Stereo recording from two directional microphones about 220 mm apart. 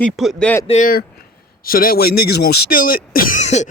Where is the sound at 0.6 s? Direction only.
35° left (ahead or behind).